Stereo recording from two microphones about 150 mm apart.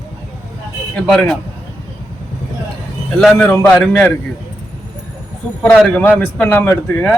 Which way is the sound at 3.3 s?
15° left (ahead or behind).